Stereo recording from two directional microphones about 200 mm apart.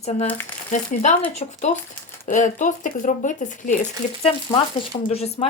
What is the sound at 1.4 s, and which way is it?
Speech, 35° left (ahead or behind).